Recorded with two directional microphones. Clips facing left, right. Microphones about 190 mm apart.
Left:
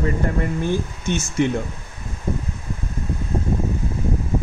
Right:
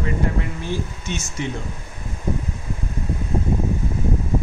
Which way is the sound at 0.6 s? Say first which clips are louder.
Left 4 dB; 55° left (ahead or behind).